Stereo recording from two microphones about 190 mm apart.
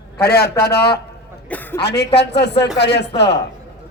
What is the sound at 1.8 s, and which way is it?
Speech, 60° left (ahead or behind).